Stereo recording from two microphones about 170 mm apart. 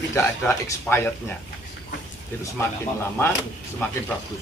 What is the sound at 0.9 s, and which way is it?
Speech, 15° left (ahead or behind).